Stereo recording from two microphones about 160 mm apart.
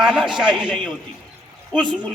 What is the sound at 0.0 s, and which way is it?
Speech, 5° right (ahead or behind).